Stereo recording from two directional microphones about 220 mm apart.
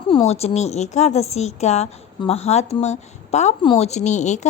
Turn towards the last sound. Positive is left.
turn(degrees=30)  # may be behind; listen again after turning